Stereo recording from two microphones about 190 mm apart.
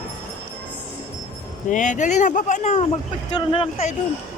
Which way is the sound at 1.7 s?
40° left (ahead or behind).